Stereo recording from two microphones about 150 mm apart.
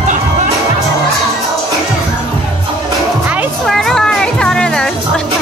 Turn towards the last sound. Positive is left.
turn(degrees=5)  # may be behind; listen again after turning